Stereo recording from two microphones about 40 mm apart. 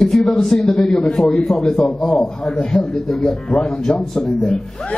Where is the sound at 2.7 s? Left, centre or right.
Centre.